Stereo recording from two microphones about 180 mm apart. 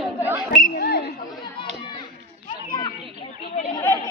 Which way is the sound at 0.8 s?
65° left (ahead or behind).